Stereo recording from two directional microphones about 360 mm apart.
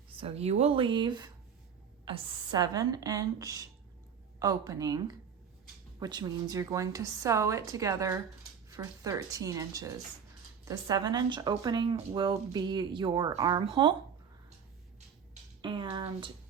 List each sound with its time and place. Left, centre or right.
0.2 s speech: centre
15.6 s speech: centre